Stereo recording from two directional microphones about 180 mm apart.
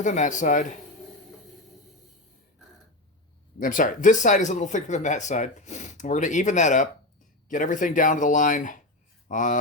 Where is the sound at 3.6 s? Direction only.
45° left (ahead or behind).